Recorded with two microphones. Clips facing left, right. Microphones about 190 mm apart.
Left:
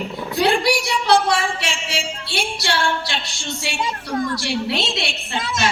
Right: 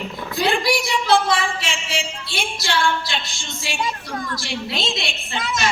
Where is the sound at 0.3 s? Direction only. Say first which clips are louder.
Left 2 dB; 70° left (ahead or behind).